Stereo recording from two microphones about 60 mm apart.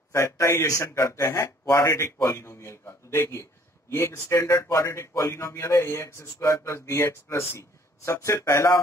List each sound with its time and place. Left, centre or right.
0.1 s speech: left
0.7 s speech: left